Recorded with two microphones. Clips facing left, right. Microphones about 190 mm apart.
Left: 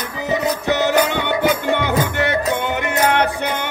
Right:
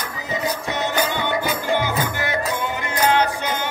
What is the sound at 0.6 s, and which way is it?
Music, 70° left (ahead or behind).